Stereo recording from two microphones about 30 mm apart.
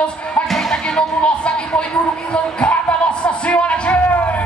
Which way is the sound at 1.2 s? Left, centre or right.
Left.